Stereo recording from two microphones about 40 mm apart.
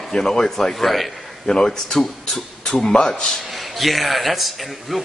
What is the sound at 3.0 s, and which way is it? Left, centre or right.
Speech, left.